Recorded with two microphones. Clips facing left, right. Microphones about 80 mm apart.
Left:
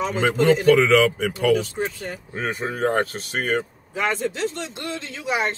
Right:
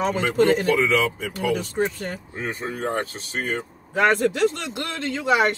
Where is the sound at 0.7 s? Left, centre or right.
Left.